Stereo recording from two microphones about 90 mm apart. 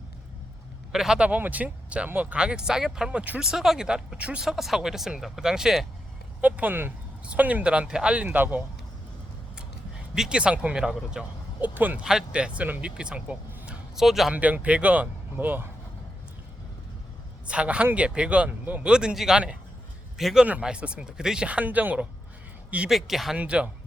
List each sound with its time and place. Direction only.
0.9 s speech: 5° right (ahead or behind)
6.4 s speech: 20° right (ahead or behind)
10.2 s speech: 10° right (ahead or behind)
11.7 s speech: 20° right (ahead or behind)
12.0 s speech: 10° right (ahead or behind)
14.3 s speech: 15° right (ahead or behind)
17.4 s speech: 10° right (ahead or behind)
22.9 s speech: centre (ahead or behind)